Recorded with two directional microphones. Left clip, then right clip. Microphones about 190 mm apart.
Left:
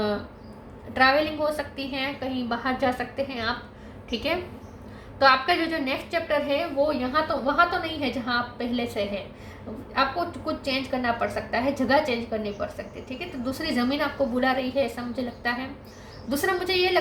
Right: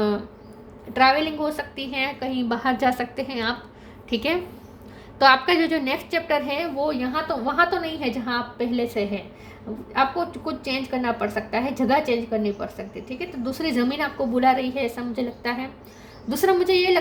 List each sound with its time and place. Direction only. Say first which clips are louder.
0.9 s a woman's voice: right 2 dB; 45° right (ahead or behind)